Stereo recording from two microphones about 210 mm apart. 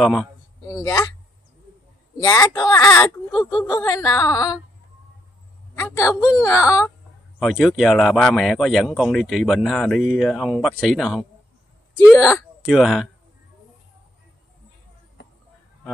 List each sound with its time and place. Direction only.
0.0 s speech: centre (ahead or behind)
0.7 s speech: 15° left (ahead or behind)
2.1 s speech: 15° left (ahead or behind)
5.8 s a man's voice: 15° left (ahead or behind)
7.3 s speech: centre (ahead or behind)
12.6 s speech: centre (ahead or behind)